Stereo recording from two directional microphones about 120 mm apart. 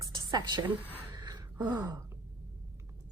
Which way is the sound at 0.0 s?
35° right (ahead or behind).